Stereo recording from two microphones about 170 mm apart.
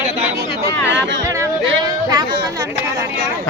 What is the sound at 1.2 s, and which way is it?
Speech, 20° right (ahead or behind).